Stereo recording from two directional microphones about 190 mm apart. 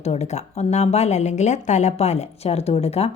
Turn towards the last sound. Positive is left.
turn(degrees=30)  # may be behind; listen again after turning